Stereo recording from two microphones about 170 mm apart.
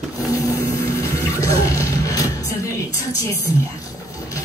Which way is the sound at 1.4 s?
20° left (ahead or behind).